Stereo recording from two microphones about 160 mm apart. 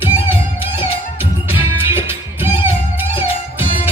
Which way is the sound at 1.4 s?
15° right (ahead or behind).